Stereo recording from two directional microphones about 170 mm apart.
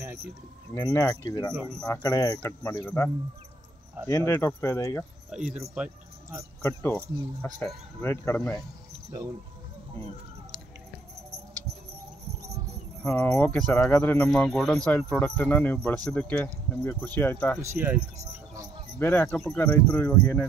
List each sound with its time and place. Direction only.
0.9 s speech: 20° left (ahead or behind)
2.8 s speech: 10° left (ahead or behind)
4.1 s speech: 15° left (ahead or behind)
5.3 s speech: 5° right (ahead or behind)
6.6 s speech: 10° left (ahead or behind)
13.0 s speech: 5° left (ahead or behind)
17.6 s speech: 15° right (ahead or behind)
17.9 s speech: 40° right (ahead or behind)
18.9 s speech: 10° left (ahead or behind)